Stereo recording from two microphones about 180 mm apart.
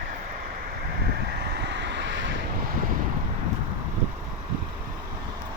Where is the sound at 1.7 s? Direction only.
75° right (ahead or behind).